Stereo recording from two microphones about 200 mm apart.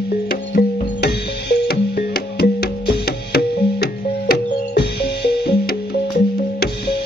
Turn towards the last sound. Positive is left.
turn(degrees=50)  # may be behind; listen again after turning